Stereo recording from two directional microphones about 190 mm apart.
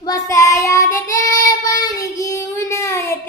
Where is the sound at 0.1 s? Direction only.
15° left (ahead or behind).